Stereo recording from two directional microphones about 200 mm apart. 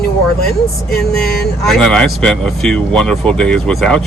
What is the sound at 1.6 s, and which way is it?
Speech, centre (ahead or behind).